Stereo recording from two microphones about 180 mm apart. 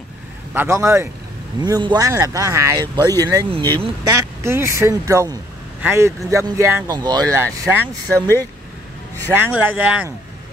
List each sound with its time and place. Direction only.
0.6 s speech: 15° right (ahead or behind)
9.3 s speech: 10° right (ahead or behind)